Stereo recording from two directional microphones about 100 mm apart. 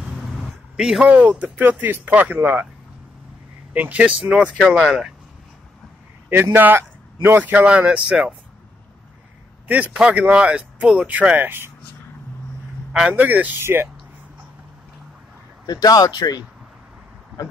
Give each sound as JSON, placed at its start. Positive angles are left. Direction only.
{"t": 0.0, "sound": "speech", "side_deg": -5}
{"t": 3.7, "sound": "speech", "side_deg": -15}
{"t": 6.2, "sound": "speech", "side_deg": -20}
{"t": 9.7, "sound": "speech", "side_deg": -15}
{"t": 13.1, "sound": "speech", "side_deg": -15}
{"t": 15.6, "sound": "speech", "side_deg": 40}